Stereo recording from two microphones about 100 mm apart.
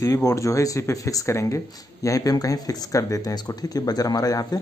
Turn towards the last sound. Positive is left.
turn(degrees=40)  # may be behind; listen again after turning